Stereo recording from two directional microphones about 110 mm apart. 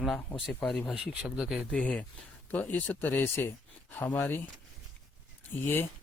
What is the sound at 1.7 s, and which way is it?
Speech, 10° left (ahead or behind).